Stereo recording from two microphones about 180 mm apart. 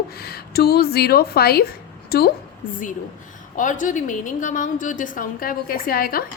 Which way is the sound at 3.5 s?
45° left (ahead or behind).